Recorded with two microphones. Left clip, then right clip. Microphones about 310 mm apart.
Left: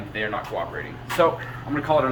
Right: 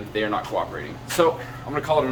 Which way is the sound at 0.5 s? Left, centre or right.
Centre.